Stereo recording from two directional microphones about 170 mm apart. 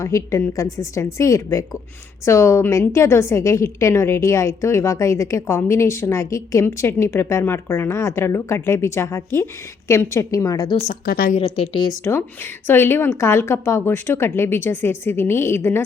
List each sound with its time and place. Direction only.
0.0 s a woman's voice: 15° left (ahead or behind)
11.0 s a woman's voice: 60° left (ahead or behind)
11.3 s a woman's voice: 35° left (ahead or behind)
12.0 s a woman's voice: 15° left (ahead or behind)